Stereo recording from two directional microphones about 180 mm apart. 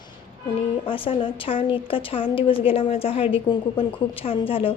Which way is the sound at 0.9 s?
30° left (ahead or behind).